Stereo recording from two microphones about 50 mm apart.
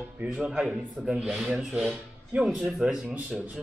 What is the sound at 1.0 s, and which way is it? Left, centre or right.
Speech, centre.